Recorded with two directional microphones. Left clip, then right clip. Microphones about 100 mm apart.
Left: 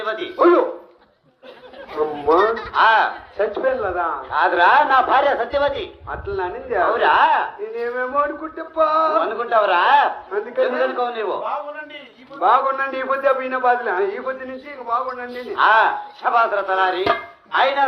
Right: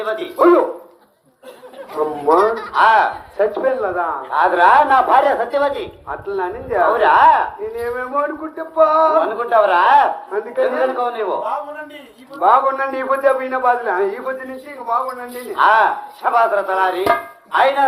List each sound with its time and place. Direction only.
0.1 s speech: 20° left (ahead or behind)
1.9 s a sound: 50° left (ahead or behind)
2.7 s a man's voice: 15° left (ahead or behind)